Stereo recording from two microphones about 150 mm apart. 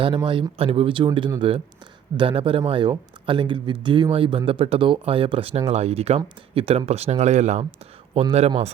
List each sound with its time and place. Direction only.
0.2 s speech: 30° right (ahead or behind)